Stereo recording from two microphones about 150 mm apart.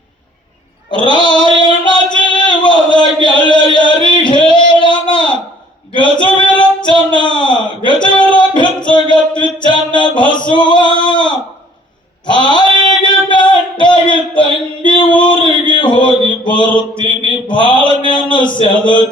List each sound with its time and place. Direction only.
0.9 s a sound: 30° left (ahead or behind)
3.8 s singing: 30° left (ahead or behind)
6.2 s female singing: 30° left (ahead or behind)
7.1 s a sound: 30° left (ahead or behind)
8.9 s music: 30° left (ahead or behind)
10.5 s male singing: 30° left (ahead or behind)
12.2 s a sound: 30° left (ahead or behind)
15.7 s mantra: 30° left (ahead or behind)
18.3 s a man's voice: 30° left (ahead or behind)